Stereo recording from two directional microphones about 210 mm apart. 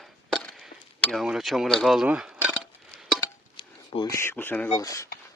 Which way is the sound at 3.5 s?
25° left (ahead or behind).